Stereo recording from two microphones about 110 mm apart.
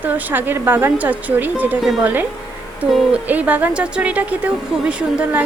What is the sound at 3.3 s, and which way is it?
Speech, 15° right (ahead or behind).